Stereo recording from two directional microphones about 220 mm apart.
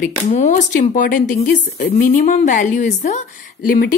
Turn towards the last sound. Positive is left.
turn(degrees=40)  # may be behind; listen again after turning